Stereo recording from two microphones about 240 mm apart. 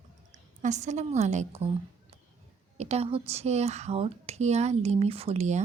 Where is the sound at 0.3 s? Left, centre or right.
Right.